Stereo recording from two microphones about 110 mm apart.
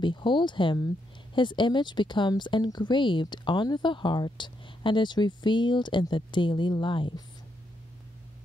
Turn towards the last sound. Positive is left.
turn(degrees=50)  # may be behind; listen again after turning